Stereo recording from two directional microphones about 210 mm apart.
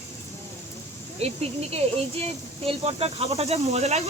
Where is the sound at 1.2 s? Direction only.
30° right (ahead or behind).